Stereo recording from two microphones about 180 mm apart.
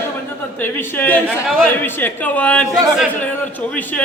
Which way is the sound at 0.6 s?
10° left (ahead or behind).